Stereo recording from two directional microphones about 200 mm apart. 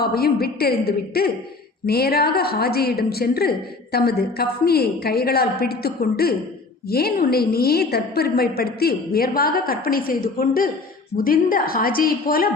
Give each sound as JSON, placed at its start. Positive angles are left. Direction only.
{"t": 0.0, "sound": "a woman's voice", "side_deg": 50}